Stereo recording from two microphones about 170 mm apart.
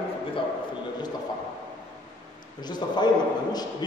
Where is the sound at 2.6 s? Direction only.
25° left (ahead or behind).